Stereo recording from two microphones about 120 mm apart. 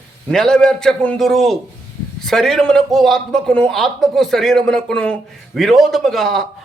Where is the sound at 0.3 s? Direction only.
5° left (ahead or behind).